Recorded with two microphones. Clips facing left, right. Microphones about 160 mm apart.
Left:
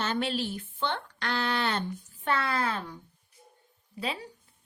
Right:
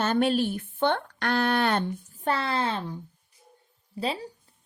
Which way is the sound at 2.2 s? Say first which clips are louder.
Right 2 dB; 30° right (ahead or behind).